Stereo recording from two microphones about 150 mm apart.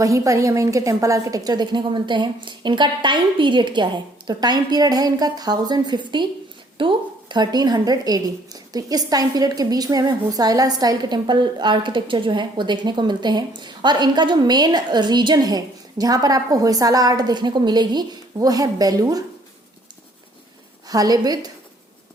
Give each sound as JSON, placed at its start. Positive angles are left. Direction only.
{"t": 0.0, "sound": "a woman's voice", "side_deg": -20}
{"t": 20.8, "sound": "a woman's voice", "side_deg": -25}